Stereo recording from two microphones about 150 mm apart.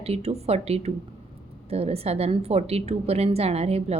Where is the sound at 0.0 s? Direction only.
45° right (ahead or behind).